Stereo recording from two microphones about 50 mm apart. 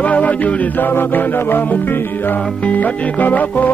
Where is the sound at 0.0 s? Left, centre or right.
Left.